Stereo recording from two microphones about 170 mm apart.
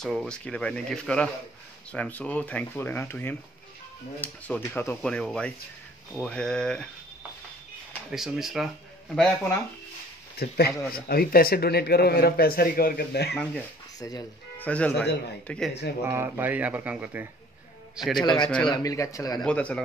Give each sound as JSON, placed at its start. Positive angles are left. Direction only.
{"t": 0.0, "sound": "speech", "side_deg": 0}
{"t": 8.1, "sound": "speech", "side_deg": 0}
{"t": 10.4, "sound": "a man's voice", "side_deg": 70}
{"t": 13.3, "sound": "speech", "side_deg": 5}
{"t": 13.9, "sound": "speech", "side_deg": 20}
{"t": 14.6, "sound": "speech", "side_deg": 10}
{"t": 16.1, "sound": "speech", "side_deg": -10}
{"t": 18.2, "sound": "speech", "side_deg": 25}
{"t": 19.4, "sound": "speech", "side_deg": 5}